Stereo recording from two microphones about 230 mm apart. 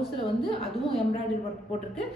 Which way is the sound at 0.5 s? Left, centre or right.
Left.